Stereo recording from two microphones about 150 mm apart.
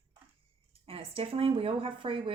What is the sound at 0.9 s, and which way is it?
A woman's voice, 40° right (ahead or behind).